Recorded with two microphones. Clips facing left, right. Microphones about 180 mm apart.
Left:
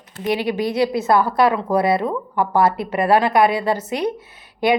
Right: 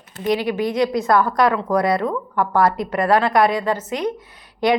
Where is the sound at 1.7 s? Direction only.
30° left (ahead or behind).